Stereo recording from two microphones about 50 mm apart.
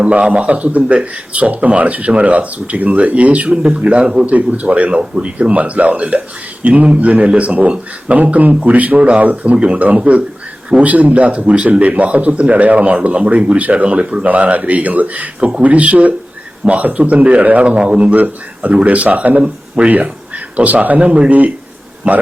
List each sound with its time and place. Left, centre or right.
0.0 s speech: right
3.5 s a man's voice: centre
3.8 s speech: right
9.2 s speech: right
9.5 s speech: right
19.4 s speech: centre
19.9 s speech: right